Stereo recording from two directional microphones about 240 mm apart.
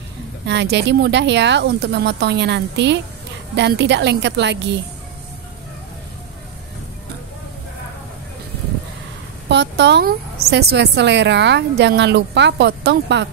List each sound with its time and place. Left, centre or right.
0.5 s a woman's voice: right
9.5 s a woman's voice: right